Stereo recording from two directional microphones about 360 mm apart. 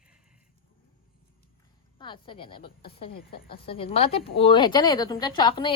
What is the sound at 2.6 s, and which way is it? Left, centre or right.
Speech, left.